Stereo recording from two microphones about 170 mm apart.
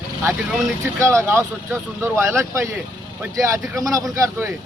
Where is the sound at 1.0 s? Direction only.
15° right (ahead or behind).